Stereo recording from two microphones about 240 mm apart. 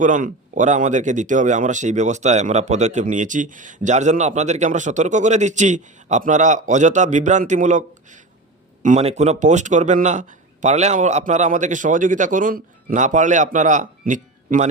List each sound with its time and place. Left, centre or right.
0.0 s speech: right